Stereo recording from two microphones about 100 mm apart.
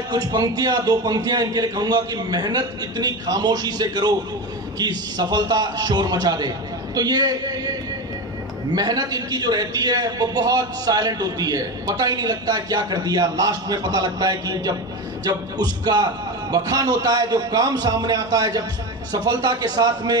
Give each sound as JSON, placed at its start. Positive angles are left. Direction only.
{"t": 0.1, "sound": "a man's voice", "side_deg": -40}
{"t": 8.7, "sound": "a man's voice", "side_deg": -40}